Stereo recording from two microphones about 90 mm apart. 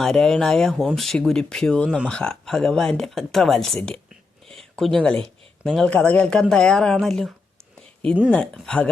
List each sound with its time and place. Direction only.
0.0 s speech: 5° left (ahead or behind)
4.4 s a sound: 5° left (ahead or behind)
5.0 s speech: 10° left (ahead or behind)
5.9 s speech: 15° left (ahead or behind)
7.8 s a sound: 10° left (ahead or behind)
8.3 s speech: 10° left (ahead or behind)